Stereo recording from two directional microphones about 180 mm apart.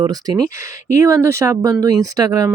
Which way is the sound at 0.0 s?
20° right (ahead or behind).